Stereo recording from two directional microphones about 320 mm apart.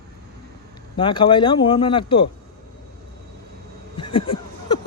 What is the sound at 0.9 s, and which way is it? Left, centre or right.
Speech, centre.